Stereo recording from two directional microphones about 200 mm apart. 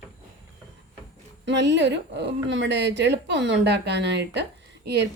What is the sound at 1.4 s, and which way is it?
Speech, 60° right (ahead or behind).